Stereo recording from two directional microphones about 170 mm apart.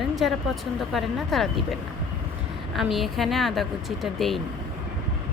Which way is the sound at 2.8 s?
Centre (ahead or behind).